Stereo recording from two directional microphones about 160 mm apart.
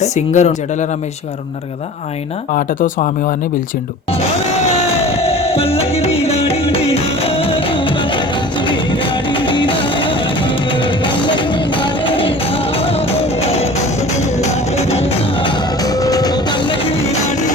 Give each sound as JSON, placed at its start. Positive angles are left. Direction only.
{"t": 0.0, "sound": "speech", "side_deg": 45}
{"t": 2.6, "sound": "speech", "side_deg": 55}
{"t": 5.0, "sound": "music", "side_deg": 40}